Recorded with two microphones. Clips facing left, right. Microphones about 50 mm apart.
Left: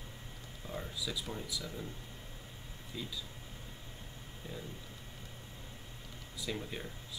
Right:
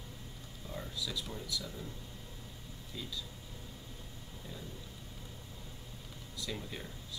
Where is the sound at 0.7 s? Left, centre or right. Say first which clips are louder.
Even; centre.